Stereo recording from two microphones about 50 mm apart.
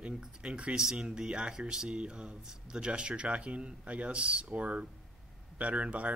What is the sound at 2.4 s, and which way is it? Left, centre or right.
Speech, centre.